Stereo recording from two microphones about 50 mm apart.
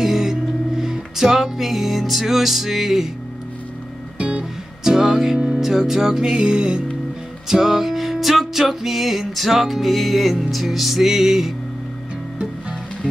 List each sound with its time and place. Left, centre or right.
0.0 s music: centre
4.2 s music: right
4.8 s music: centre